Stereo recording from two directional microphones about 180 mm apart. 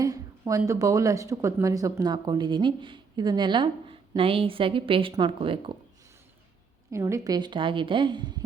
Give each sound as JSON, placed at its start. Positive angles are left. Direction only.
{"t": 0.0, "sound": "speech", "side_deg": -20}
{"t": 6.9, "sound": "speech", "side_deg": -15}